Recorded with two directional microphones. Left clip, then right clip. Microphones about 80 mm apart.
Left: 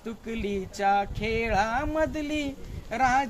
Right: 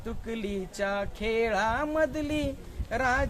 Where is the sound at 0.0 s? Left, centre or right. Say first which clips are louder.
Left 2 dB; right.